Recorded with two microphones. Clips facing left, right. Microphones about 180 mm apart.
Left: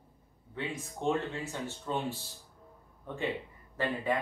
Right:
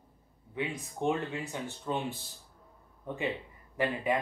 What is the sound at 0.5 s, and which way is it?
Speech, 15° right (ahead or behind).